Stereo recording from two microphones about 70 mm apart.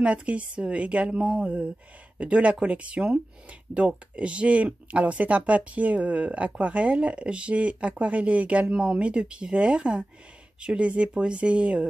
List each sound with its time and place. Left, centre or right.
0.0 s speech: centre